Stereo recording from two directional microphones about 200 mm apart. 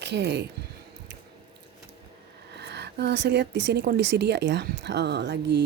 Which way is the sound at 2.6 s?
55° right (ahead or behind).